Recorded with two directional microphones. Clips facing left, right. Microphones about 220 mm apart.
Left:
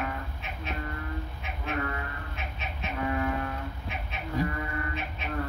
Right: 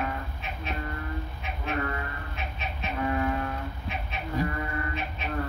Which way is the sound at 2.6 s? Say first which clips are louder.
Right 2 dB; 35° right (ahead or behind).